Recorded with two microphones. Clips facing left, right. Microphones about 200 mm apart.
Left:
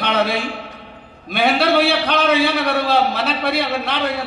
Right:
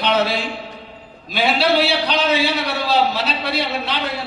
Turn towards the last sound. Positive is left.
turn(degrees=55)  # may be behind; listen again after turning